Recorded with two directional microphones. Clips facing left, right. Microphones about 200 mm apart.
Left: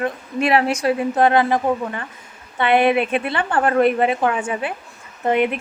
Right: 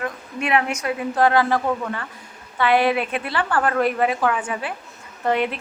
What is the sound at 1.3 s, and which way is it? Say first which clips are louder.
A woman's voice: left 1 dB; 20° left (ahead or behind).